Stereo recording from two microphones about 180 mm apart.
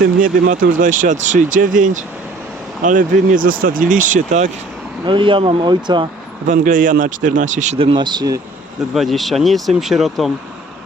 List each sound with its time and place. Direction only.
0.0 s speech: 50° right (ahead or behind)
5.0 s speech: 30° right (ahead or behind)
6.5 s speech: 45° right (ahead or behind); by 8.4 s 25° right (ahead or behind)
9.0 s speech: centre (ahead or behind)